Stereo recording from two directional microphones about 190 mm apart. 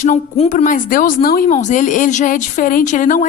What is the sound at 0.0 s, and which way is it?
Speech, 40° left (ahead or behind).